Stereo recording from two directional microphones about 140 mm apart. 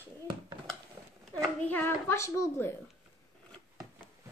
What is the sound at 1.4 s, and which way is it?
A child's voice, 10° left (ahead or behind).